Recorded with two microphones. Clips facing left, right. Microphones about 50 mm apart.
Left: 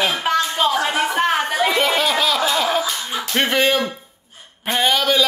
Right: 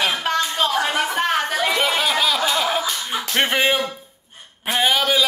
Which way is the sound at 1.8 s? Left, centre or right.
Centre.